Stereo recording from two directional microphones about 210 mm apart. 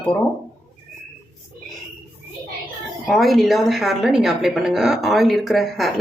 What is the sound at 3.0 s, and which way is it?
A woman's voice, centre (ahead or behind).